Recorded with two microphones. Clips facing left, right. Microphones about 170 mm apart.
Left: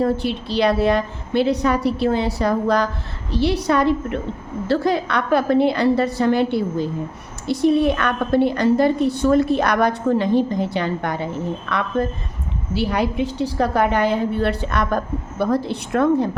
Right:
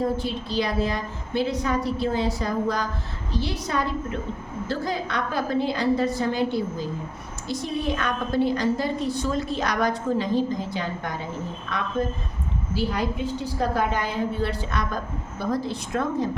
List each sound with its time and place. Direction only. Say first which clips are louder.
0.0 s a woman's voice: left 5 dB; 70° left (ahead or behind)